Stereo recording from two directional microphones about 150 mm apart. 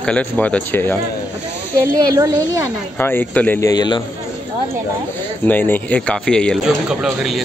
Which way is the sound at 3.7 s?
30° left (ahead or behind).